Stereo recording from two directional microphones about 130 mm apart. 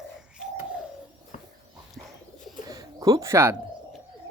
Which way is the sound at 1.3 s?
90° left.